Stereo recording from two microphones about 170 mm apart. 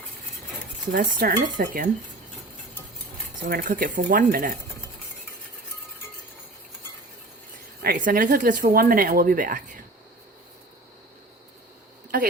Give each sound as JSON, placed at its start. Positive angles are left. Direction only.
{"t": 0.9, "sound": "cutlery", "side_deg": -55}
{"t": 3.4, "sound": "speech", "side_deg": -55}
{"t": 7.8, "sound": "speech", "side_deg": -55}